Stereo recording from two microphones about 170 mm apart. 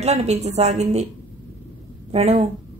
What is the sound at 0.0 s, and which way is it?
A woman's voice, 40° right (ahead or behind).